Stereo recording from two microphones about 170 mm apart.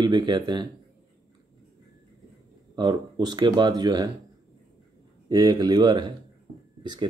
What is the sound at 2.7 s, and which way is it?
Speech, 25° right (ahead or behind).